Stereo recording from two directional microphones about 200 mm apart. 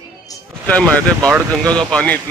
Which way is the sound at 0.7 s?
5° left (ahead or behind).